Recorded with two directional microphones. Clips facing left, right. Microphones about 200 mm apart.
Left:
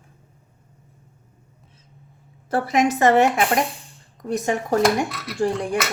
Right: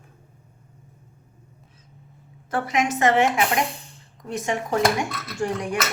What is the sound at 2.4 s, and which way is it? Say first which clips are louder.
A woman's voice: left 4 dB; 35° left (ahead or behind).